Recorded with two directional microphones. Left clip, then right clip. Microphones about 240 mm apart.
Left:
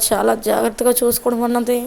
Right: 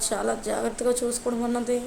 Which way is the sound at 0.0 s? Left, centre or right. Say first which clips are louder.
Left 10 dB; left.